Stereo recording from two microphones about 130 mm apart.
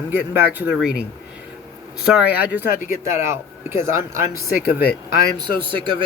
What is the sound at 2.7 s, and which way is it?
Speech, 85° left.